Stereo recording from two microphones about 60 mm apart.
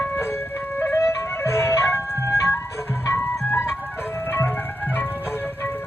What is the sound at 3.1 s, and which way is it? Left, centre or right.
Ice cream truck, left.